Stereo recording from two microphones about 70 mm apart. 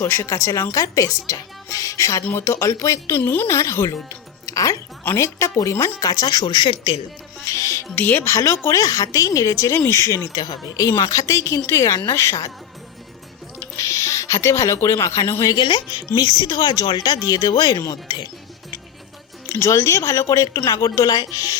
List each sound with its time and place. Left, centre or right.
0.0 s a woman's voice: left
2.2 s speech: left
3.2 s a woman's voice: left
3.4 s a woman's voice: left
4.4 s music: left
5.1 s a woman's voice: left
6.0 s speech: left
7.4 s music: left
7.9 s a woman's voice: left
8.2 s a woman's voice: left
10.3 s a woman's voice: left
13.7 s speech: left
15.5 s speech: left
19.5 s a woman's voice: left